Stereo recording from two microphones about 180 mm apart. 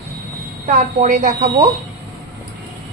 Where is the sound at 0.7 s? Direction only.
45° right (ahead or behind).